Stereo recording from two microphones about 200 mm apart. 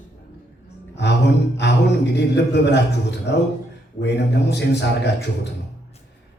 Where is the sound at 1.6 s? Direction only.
60° left (ahead or behind).